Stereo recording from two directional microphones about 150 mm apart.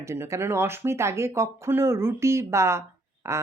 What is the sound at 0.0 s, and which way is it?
Speech, 20° right (ahead or behind).